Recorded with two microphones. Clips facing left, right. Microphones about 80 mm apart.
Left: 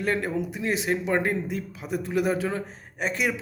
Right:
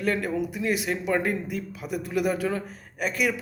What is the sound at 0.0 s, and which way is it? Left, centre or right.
A man's voice, left.